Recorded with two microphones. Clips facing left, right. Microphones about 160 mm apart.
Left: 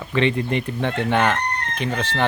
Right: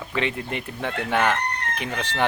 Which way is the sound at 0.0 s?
5° right (ahead or behind).